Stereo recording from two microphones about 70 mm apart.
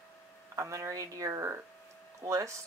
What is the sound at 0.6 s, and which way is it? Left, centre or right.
Speech, right.